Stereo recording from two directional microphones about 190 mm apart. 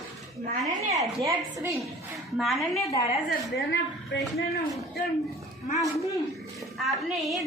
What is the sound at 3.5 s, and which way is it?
Speech, 65° left (ahead or behind).